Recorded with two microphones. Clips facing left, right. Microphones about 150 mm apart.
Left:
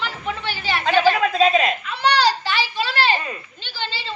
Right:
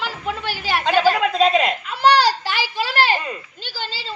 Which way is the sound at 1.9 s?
45° right (ahead or behind).